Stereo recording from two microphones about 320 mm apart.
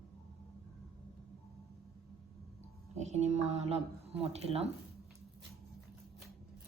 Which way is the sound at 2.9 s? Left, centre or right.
Right.